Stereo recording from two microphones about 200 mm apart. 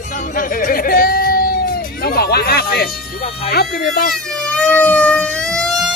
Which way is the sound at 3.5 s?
50° left (ahead or behind).